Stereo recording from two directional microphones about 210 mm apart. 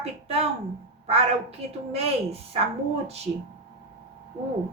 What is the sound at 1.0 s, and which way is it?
A woman's voice, 30° right (ahead or behind).